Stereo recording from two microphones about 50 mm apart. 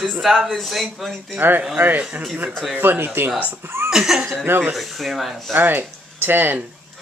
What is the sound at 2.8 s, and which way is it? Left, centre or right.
Speech, right.